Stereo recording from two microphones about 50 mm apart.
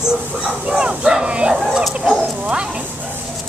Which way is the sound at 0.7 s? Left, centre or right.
Right.